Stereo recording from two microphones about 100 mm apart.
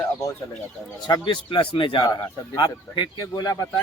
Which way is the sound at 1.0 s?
50° left (ahead or behind).